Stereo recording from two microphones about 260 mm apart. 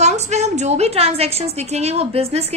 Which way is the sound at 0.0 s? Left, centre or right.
Right.